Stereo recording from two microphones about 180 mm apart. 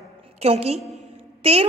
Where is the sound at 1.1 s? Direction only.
35° right (ahead or behind).